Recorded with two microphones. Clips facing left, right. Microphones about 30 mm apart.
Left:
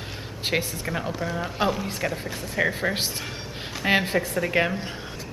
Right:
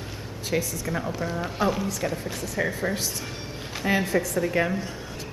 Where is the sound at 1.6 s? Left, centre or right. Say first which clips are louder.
Even; left.